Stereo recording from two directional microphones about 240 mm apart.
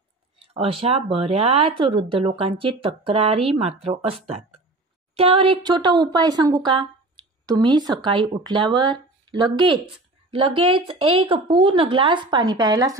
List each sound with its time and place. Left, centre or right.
0.4 s speech: right